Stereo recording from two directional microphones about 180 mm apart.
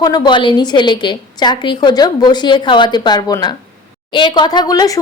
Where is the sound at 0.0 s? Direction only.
25° left (ahead or behind).